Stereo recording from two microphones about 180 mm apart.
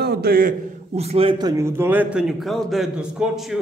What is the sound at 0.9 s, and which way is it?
Speech, 35° right (ahead or behind).